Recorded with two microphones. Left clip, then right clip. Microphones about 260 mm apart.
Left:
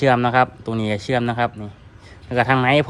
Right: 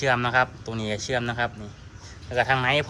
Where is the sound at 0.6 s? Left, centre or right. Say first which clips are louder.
Left 6 dB; left.